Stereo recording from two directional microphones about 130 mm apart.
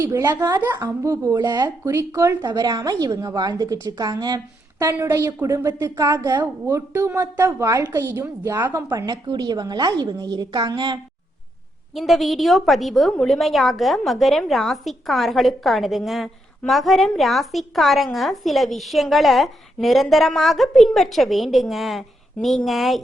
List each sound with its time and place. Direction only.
0.0 s a woman's voice: 20° right (ahead or behind)
1.0 s a woman's voice: 20° right (ahead or behind)
1.4 s a woman's voice: 30° right (ahead or behind)
4.9 s a woman's voice: 20° right (ahead or behind)
8.9 s a woman's voice: 30° right (ahead or behind)
11.9 s a woman's voice: centre (ahead or behind)